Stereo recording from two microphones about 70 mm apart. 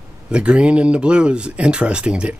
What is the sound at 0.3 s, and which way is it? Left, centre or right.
Speech, centre.